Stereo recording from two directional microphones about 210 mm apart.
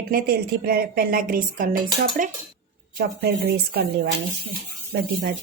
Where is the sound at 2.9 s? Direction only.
50° right (ahead or behind).